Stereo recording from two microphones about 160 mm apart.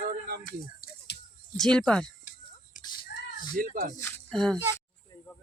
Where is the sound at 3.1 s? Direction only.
75° left (ahead or behind).